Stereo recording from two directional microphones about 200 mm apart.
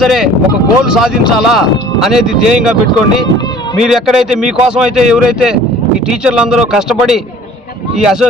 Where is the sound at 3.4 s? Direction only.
20° left (ahead or behind).